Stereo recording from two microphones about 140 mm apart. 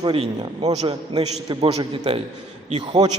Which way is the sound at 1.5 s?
35° right (ahead or behind).